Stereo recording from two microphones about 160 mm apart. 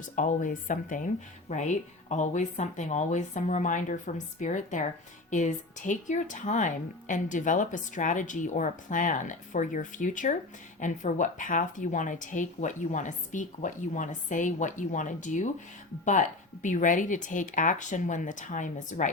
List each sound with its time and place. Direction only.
0.0 s speech: 55° left (ahead or behind)